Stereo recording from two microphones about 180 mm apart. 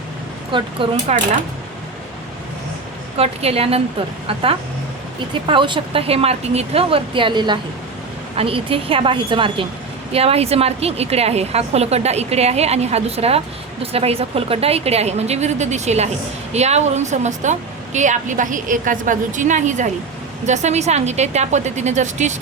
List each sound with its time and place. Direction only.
0.5 s speech: 30° right (ahead or behind)
3.2 s a woman's voice: 35° right (ahead or behind)
5.3 s a woman's voice: 30° right (ahead or behind)